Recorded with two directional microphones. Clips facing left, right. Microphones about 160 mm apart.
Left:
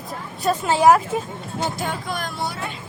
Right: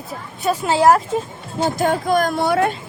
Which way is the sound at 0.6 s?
10° right (ahead or behind).